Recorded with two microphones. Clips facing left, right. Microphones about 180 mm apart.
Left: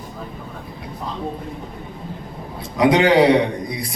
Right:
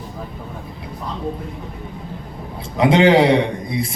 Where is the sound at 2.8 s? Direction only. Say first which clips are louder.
Right 1 dB; 25° right (ahead or behind).